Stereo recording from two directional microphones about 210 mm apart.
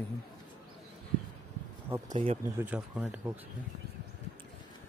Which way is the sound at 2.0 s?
30° right (ahead or behind).